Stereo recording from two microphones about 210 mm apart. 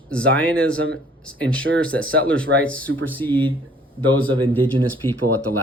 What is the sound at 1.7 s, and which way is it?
Speech, 60° right (ahead or behind).